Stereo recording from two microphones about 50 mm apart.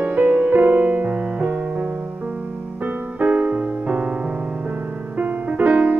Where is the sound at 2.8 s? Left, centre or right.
Right.